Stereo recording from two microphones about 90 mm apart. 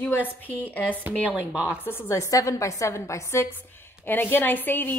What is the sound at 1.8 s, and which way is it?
A woman's voice, 30° left (ahead or behind).